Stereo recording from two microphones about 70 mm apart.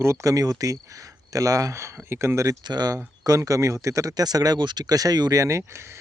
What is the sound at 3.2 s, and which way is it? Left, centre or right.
Speech, right.